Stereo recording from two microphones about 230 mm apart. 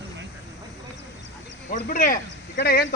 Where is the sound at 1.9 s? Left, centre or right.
Left.